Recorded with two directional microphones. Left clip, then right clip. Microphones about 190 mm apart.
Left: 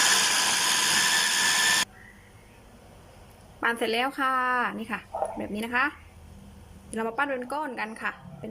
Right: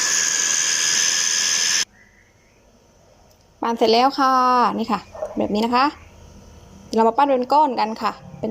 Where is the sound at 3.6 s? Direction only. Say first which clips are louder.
Right 9 dB; 20° right (ahead or behind).